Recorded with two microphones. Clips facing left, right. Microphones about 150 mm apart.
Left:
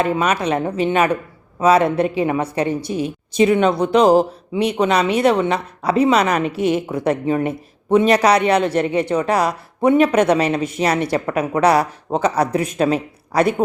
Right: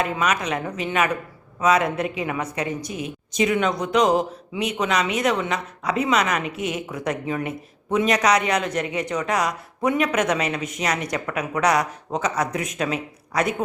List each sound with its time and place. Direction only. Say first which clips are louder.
0.0 s a woman's voice: left 5 dB; 30° left (ahead or behind)